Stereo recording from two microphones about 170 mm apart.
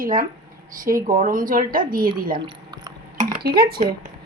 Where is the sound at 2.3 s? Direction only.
25° right (ahead or behind).